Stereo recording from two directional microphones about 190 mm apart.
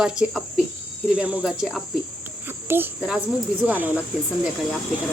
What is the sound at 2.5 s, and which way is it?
A child's voice, 10° right (ahead or behind).